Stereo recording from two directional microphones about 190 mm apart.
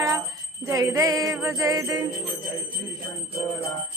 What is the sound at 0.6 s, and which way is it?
Jingle bell, 15° right (ahead or behind).